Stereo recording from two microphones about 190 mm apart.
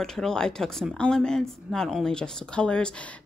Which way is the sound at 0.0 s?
5° left (ahead or behind).